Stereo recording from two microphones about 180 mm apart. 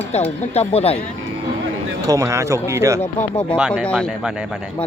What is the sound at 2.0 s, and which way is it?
Speech, 20° right (ahead or behind).